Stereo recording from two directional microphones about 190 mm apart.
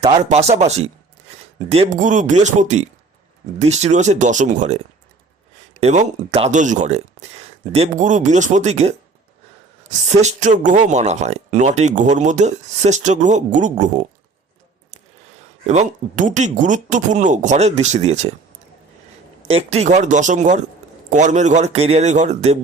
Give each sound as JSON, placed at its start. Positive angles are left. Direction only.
{"t": 0.3, "sound": "speech", "side_deg": -35}
{"t": 1.7, "sound": "speech", "side_deg": -35}
{"t": 5.8, "sound": "speech", "side_deg": -35}
{"t": 10.1, "sound": "speech", "side_deg": -35}
{"t": 15.6, "sound": "speech", "side_deg": -40}
{"t": 19.5, "sound": "speech", "side_deg": -30}